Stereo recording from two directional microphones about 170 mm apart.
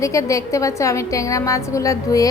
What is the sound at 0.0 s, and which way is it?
A woman's voice, 20° left (ahead or behind).